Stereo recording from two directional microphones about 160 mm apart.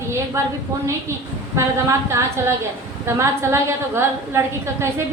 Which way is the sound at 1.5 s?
15° right (ahead or behind).